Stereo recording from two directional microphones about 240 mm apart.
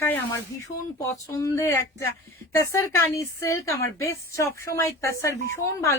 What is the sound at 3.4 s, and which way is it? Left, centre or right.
A man's voice, centre.